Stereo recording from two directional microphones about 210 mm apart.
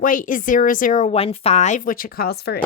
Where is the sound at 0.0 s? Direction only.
40° left (ahead or behind).